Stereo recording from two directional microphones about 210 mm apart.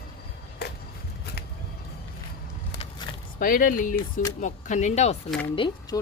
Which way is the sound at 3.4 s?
40° left (ahead or behind).